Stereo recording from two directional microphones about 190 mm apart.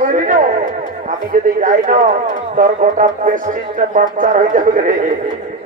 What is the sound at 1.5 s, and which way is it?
Speech, 45° right (ahead or behind).